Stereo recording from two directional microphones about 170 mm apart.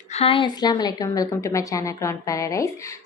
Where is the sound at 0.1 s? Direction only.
35° left (ahead or behind).